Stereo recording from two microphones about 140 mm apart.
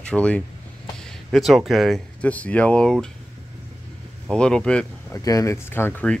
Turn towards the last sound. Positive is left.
turn(degrees=15)  # may be behind; listen again after turning